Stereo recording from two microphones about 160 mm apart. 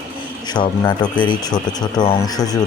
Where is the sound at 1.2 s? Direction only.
30° left (ahead or behind).